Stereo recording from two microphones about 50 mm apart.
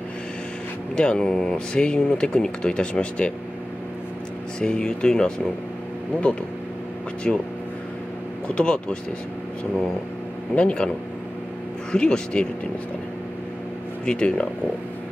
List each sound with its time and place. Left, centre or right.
0.9 s speech: centre
4.6 s speech: centre
7.3 s speech: centre
8.5 s speech: left
10.5 s speech: left
11.9 s speech: centre
14.0 s speech: left